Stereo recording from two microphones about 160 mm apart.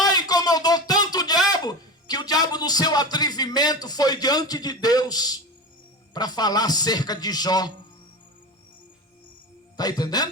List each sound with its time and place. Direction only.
0.0 s a sound: 25° left (ahead or behind)
1.5 s speech: 25° left (ahead or behind)
9.7 s speech: 25° left (ahead or behind)